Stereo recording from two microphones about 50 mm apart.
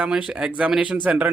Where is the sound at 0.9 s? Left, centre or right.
Right.